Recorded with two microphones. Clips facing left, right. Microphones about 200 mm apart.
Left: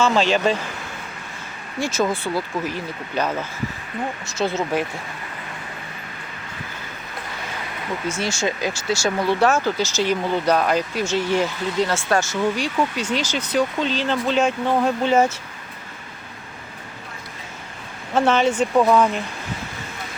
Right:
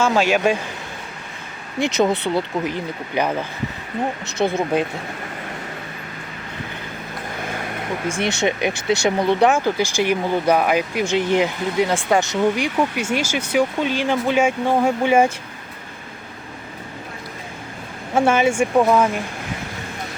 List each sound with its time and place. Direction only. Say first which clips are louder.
0.0 s speech: right 1 dB; 10° right (ahead or behind)
1.8 s speech: right 4 dB; 20° right (ahead or behind)
4.0 s speech: right 4 dB; 25° right (ahead or behind)
4.4 s speech: right 3 dB; 15° right (ahead or behind)
8.9 s speech: right 3 dB; 20° right (ahead or behind)
18.1 s speech: right 1 dB; 10° right (ahead or behind)